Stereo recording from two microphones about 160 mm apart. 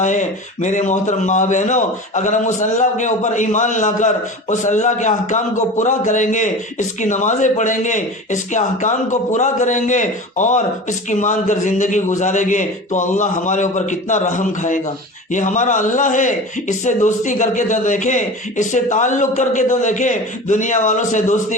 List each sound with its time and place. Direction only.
0.0 s speech: 50° left (ahead or behind)